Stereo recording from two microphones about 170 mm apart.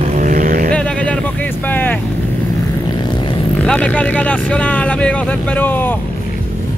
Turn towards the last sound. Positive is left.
turn(degrees=10)  # may be behind; listen again after turning